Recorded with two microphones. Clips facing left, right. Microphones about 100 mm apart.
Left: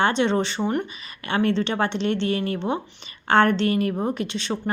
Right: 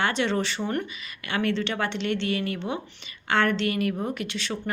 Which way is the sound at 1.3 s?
30° left (ahead or behind).